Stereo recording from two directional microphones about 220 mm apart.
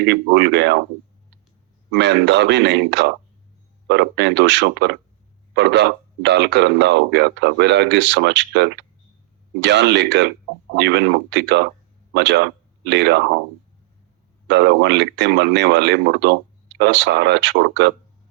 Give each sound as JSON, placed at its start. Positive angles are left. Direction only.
{"t": 0.0, "sound": "speech", "side_deg": -50}
{"t": 1.9, "sound": "speech", "side_deg": -50}
{"t": 14.4, "sound": "speech", "side_deg": -50}